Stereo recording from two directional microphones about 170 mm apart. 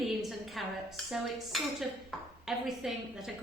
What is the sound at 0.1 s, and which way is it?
A woman's voice, centre (ahead or behind).